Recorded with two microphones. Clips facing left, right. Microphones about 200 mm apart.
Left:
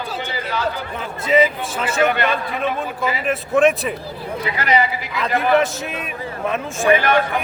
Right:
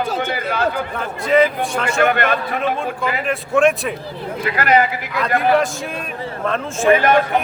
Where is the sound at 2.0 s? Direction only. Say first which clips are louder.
Right 1 dB; 55° right (ahead or behind).